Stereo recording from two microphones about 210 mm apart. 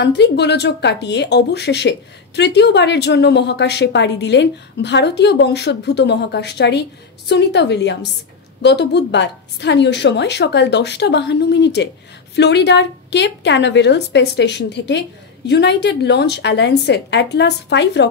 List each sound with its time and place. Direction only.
0.0 s speech: 55° left (ahead or behind)